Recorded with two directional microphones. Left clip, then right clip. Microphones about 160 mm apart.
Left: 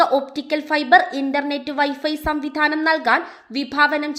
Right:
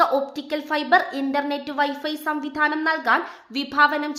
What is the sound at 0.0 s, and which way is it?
A woman's voice, 25° left (ahead or behind).